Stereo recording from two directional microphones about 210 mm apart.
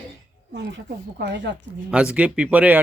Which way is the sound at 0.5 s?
55° right (ahead or behind).